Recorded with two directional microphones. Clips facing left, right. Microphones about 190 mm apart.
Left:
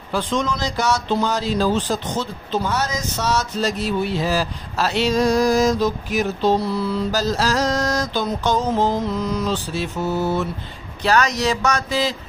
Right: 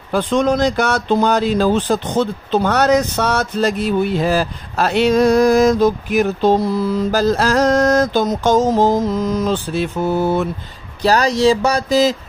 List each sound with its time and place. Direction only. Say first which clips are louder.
0.1 s speech: right 7 dB; 55° right (ahead or behind)
11.0 s speech: right 4 dB; 35° right (ahead or behind)